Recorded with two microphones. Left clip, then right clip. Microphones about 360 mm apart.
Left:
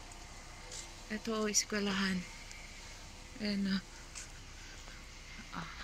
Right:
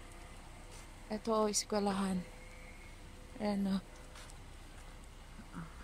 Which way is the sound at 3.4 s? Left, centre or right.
Centre.